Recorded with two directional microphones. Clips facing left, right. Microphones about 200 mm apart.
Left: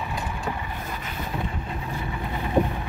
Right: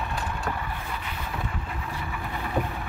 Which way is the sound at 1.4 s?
25° left (ahead or behind).